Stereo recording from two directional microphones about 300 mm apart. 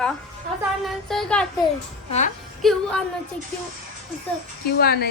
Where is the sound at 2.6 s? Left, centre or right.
Centre.